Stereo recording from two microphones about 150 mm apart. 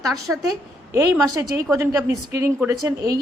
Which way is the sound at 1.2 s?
20° right (ahead or behind).